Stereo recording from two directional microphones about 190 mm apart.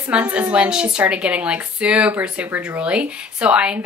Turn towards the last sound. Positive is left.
turn(degrees=-5)  # may be behind; listen again after turning